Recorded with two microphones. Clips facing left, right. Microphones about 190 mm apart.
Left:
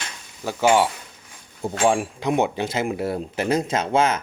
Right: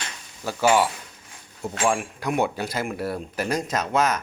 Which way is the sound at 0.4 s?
20° left (ahead or behind).